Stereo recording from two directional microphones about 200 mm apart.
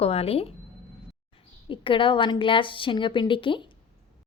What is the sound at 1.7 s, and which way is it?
A woman's voice, 25° left (ahead or behind).